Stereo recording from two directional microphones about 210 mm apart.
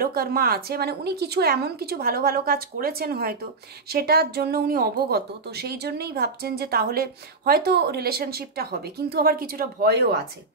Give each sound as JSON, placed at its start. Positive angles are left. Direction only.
{"t": 0.0, "sound": "speech", "side_deg": -45}